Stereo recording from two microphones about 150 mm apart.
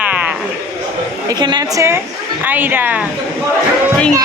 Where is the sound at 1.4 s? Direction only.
30° right (ahead or behind).